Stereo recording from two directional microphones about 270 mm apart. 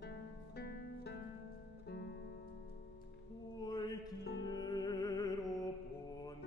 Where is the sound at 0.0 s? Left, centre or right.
Left.